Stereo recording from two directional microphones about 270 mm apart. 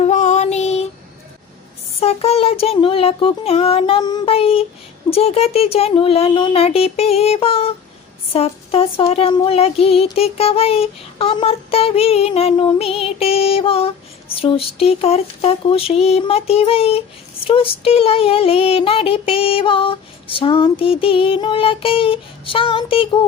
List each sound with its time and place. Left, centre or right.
0.0 s child singing: left
2.0 s child singing: left